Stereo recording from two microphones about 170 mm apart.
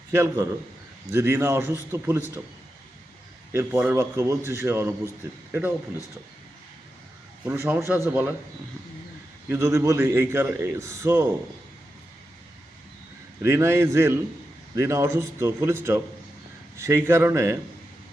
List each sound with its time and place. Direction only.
0.1 s a man's voice: 15° right (ahead or behind)
3.5 s a man's voice: 15° right (ahead or behind)
7.4 s a man's voice: 10° right (ahead or behind)
9.5 s a man's voice: 15° right (ahead or behind)
13.4 s a man's voice: 15° right (ahead or behind)